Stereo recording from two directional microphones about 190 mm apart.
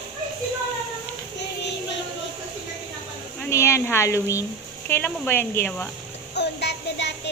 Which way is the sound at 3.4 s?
15° left (ahead or behind).